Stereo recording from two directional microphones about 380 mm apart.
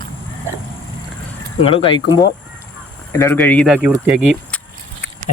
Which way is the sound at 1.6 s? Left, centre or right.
Centre.